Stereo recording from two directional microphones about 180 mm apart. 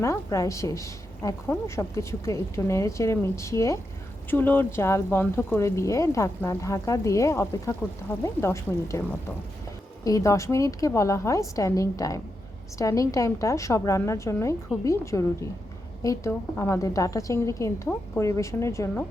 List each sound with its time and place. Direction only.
0.0 s speech: 15° left (ahead or behind)